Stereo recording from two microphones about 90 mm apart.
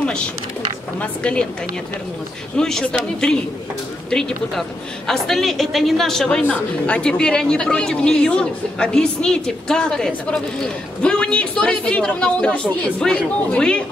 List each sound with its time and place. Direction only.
2.5 s a woman's voice: 5° left (ahead or behind)